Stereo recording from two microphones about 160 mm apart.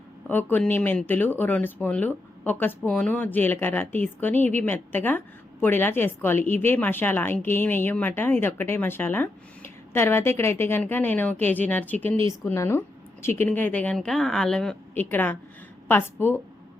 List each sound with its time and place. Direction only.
0.3 s speech: 10° left (ahead or behind)